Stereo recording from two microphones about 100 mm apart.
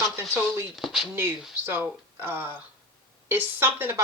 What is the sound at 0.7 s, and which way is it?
Speech, centre (ahead or behind).